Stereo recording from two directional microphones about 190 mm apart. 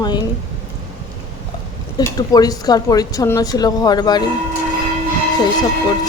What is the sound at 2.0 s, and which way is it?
A woman's voice, 20° left (ahead or behind).